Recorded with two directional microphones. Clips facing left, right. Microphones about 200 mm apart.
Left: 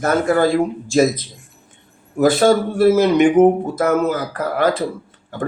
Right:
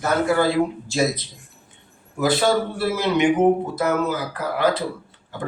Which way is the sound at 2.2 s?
50° left (ahead or behind).